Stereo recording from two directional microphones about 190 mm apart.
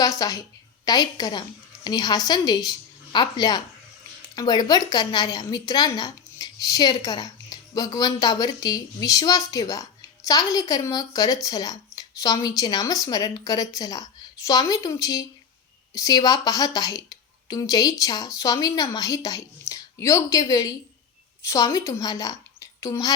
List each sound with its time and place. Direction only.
0.0 s a woman's voice: 20° left (ahead or behind)